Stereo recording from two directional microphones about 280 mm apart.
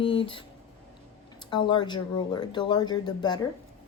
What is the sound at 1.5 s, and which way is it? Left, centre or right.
Speech, centre.